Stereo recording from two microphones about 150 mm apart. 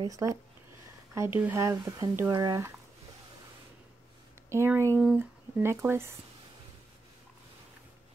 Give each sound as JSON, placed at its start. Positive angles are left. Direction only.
{"t": 0.0, "sound": "speech", "side_deg": -20}
{"t": 4.5, "sound": "speech", "side_deg": -20}